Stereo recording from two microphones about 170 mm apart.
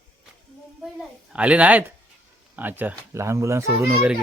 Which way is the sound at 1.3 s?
5° right (ahead or behind).